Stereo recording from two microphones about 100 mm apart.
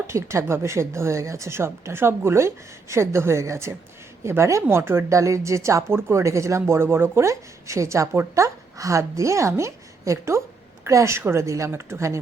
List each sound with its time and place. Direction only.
0.1 s speech: 30° right (ahead or behind)